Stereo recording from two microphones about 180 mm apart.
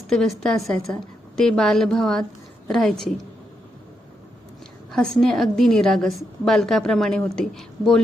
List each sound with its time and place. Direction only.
0.1 s a woman's voice: centre (ahead or behind)
4.9 s a woman's voice: centre (ahead or behind)